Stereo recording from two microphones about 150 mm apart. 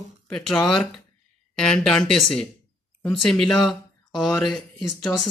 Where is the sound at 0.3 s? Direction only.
5° left (ahead or behind).